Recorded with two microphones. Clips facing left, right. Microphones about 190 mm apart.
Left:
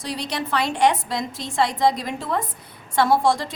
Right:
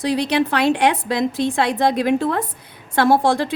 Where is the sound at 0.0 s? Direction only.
60° right (ahead or behind).